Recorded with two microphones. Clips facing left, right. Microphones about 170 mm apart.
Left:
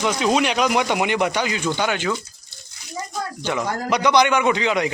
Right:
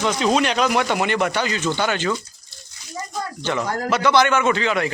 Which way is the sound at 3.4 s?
10° left (ahead or behind).